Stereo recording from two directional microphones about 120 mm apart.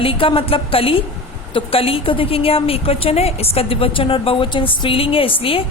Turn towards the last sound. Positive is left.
turn(degrees=50)  # may be behind; listen again after turning